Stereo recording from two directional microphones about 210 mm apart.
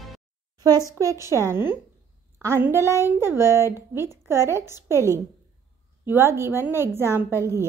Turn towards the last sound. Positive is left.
turn(degrees=-10)  # may be behind; listen again after turning